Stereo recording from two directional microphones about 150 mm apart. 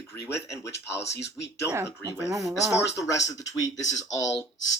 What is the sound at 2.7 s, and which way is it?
Speech, 20° left (ahead or behind).